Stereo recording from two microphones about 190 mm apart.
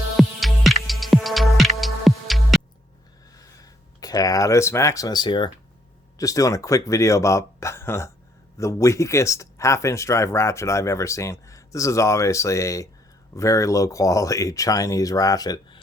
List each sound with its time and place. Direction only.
0.2 s music: centre (ahead or behind)
3.6 s speech: 20° left (ahead or behind)